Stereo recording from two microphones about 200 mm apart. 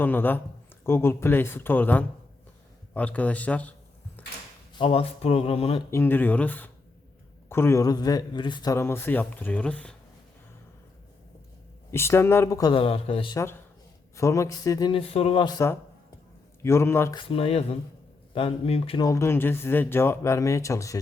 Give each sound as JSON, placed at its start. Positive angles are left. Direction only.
{"t": 0.0, "sound": "a man's voice", "side_deg": 10}
{"t": 4.2, "sound": "a sound", "side_deg": 10}
{"t": 4.7, "sound": "speech", "side_deg": 25}
{"t": 5.9, "sound": "a man's voice", "side_deg": 10}
{"t": 11.9, "sound": "a man's voice", "side_deg": 10}
{"t": 14.2, "sound": "a man's voice", "side_deg": 15}
{"t": 17.2, "sound": "speech", "side_deg": 30}
{"t": 19.0, "sound": "a man's voice", "side_deg": 15}